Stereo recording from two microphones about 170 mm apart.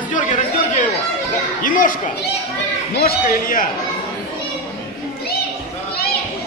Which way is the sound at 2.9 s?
60° left (ahead or behind).